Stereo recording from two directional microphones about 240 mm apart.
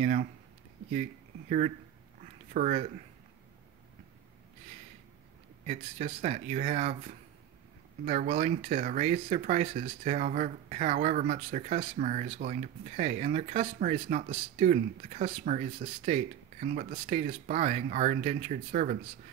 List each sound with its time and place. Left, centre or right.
0.0 s speech: right
2.5 s speech: right
5.7 s speech: right